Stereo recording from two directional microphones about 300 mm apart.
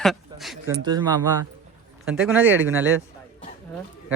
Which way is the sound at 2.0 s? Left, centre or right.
Centre.